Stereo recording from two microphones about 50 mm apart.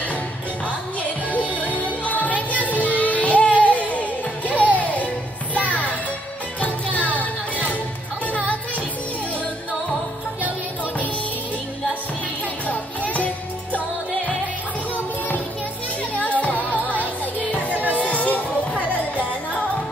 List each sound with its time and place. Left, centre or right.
1.3 s music: left
8.3 s music: left
12.6 s music: left
16.2 s music: left